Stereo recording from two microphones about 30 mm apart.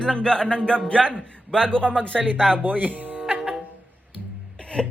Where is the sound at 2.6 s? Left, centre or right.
Right.